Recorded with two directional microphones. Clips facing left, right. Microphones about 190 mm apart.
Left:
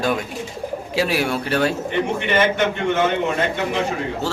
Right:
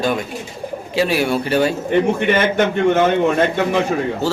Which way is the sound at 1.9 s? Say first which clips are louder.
Right 5 dB; 50° right (ahead or behind).